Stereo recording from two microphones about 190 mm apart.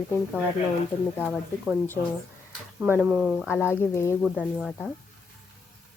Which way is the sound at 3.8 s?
15° left (ahead or behind).